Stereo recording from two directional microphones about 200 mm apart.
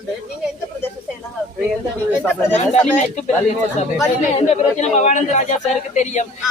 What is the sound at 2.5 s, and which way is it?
Speech, 35° left (ahead or behind).